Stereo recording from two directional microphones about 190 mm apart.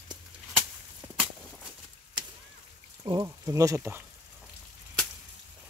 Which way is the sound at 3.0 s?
20° right (ahead or behind).